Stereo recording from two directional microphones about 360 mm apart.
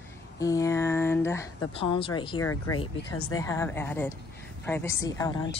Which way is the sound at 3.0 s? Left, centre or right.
Left.